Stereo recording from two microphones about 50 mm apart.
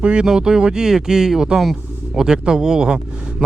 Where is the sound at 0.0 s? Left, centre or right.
Right.